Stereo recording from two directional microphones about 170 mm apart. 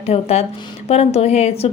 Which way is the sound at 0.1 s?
40° left (ahead or behind).